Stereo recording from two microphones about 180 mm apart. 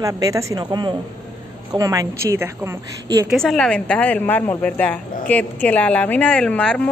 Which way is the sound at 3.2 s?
Centre (ahead or behind).